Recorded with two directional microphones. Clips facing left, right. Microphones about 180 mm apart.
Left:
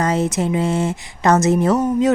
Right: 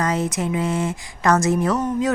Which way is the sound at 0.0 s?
25° left (ahead or behind).